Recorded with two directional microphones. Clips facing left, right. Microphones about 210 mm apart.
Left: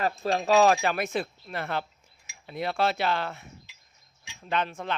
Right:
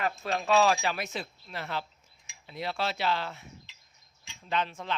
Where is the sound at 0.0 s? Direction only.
35° left (ahead or behind); by 3.4 s 55° left (ahead or behind).